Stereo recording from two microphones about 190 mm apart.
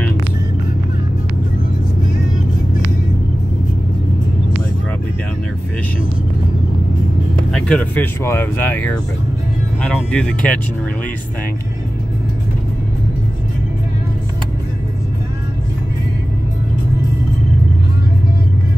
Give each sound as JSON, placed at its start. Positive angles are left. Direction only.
{"t": 7.5, "sound": "speech", "side_deg": 5}